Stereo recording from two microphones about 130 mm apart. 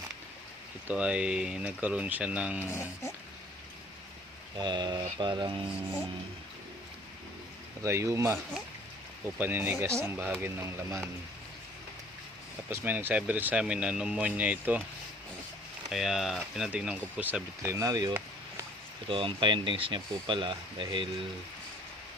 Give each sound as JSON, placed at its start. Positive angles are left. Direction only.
{"t": 0.9, "sound": "speech", "side_deg": -10}
{"t": 4.5, "sound": "speech", "side_deg": -35}
{"t": 7.8, "sound": "speech", "side_deg": -20}
{"t": 9.4, "sound": "speech", "side_deg": -15}
{"t": 12.7, "sound": "speech", "side_deg": -15}
{"t": 15.9, "sound": "speech", "side_deg": 0}
{"t": 19.0, "sound": "speech", "side_deg": -40}